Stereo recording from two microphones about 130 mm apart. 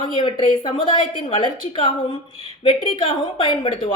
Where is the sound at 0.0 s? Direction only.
40° left (ahead or behind).